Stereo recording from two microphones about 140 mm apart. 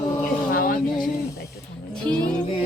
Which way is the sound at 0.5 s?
90° left.